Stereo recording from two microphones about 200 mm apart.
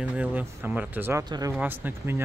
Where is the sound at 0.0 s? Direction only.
5° right (ahead or behind).